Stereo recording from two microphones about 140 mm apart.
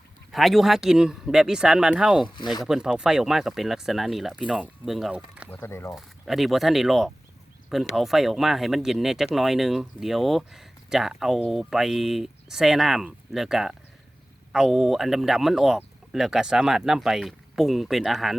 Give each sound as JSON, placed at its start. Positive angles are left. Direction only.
{"t": 0.3, "sound": "speech", "side_deg": 0}
{"t": 5.5, "sound": "speech", "side_deg": 15}
{"t": 5.9, "sound": "speech", "side_deg": 0}